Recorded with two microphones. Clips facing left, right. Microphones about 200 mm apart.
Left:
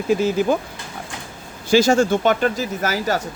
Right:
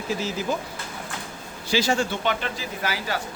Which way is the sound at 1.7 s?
45° left (ahead or behind).